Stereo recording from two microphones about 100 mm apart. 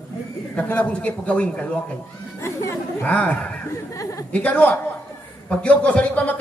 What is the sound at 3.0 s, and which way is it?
Speech, 15° left (ahead or behind).